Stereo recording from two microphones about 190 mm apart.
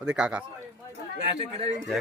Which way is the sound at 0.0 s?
5° right (ahead or behind).